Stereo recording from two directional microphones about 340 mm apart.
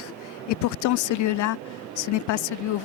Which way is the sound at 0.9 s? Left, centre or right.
Left.